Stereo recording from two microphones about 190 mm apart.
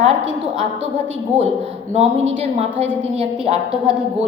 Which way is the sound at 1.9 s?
35° right (ahead or behind).